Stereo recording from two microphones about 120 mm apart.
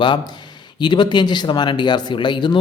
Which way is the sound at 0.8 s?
40° left (ahead or behind).